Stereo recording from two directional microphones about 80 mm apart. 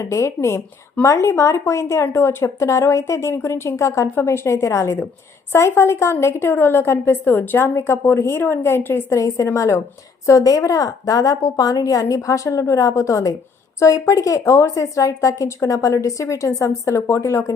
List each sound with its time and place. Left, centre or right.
0.0 s a woman's voice: left